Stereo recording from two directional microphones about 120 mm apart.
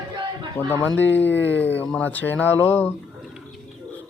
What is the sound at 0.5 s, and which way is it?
Speech, 15° left (ahead or behind).